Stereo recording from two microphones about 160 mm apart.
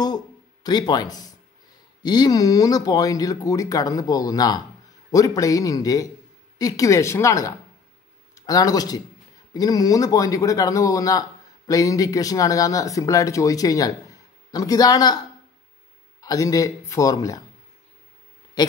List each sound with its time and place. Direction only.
0.7 s speech: 25° left (ahead or behind)
16.2 s speech: 20° left (ahead or behind)
18.6 s speech: 25° left (ahead or behind)